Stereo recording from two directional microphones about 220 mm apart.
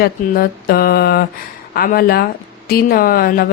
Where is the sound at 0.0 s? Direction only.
45° left (ahead or behind).